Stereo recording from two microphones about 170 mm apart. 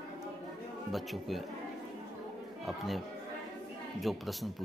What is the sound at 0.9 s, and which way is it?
Speech, centre (ahead or behind).